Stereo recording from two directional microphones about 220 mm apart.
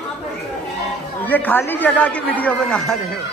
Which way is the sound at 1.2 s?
10° left (ahead or behind).